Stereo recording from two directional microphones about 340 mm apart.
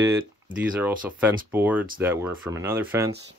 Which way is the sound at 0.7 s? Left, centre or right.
Centre.